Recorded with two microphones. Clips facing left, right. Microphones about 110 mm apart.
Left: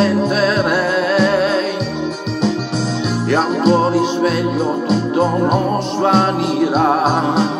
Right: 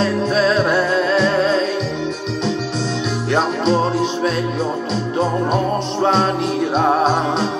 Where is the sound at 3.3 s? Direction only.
5° left (ahead or behind).